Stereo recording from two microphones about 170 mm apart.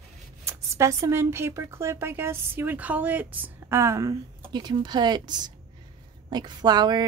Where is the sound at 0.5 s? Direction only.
15° right (ahead or behind).